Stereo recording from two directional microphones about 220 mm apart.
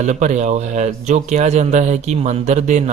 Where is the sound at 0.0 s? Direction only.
35° right (ahead or behind).